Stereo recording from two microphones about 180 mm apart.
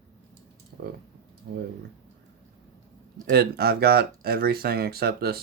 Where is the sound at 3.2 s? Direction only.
60° right (ahead or behind).